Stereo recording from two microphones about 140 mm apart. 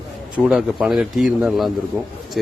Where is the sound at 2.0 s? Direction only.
15° right (ahead or behind).